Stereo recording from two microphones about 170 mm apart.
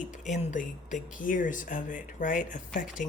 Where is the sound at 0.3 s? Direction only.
45° left (ahead or behind).